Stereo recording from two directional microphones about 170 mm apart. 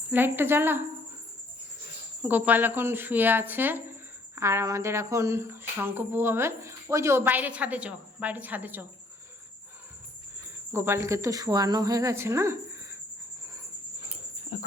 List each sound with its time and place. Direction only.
0.1 s speech: 10° right (ahead or behind)
2.2 s speech: 10° right (ahead or behind)
10.7 s speech: 15° right (ahead or behind)